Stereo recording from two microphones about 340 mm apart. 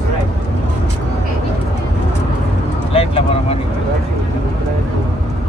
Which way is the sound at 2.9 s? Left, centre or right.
Centre.